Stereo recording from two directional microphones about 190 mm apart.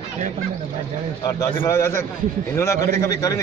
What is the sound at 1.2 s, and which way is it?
A man's voice, 15° left (ahead or behind).